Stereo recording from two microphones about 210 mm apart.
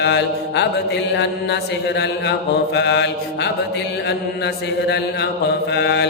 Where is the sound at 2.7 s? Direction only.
55° left (ahead or behind).